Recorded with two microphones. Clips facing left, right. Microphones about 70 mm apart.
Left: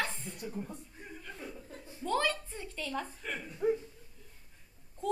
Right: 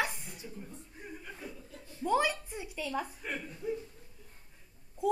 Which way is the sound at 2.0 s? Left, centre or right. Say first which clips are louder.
Right 2 dB; centre.